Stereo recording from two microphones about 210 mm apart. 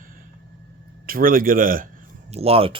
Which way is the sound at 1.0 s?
45° right (ahead or behind).